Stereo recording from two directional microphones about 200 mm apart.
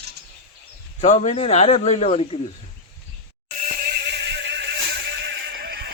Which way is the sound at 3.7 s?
50° right (ahead or behind).